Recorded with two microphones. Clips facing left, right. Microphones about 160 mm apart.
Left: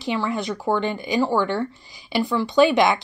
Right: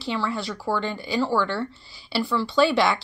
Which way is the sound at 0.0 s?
15° left (ahead or behind).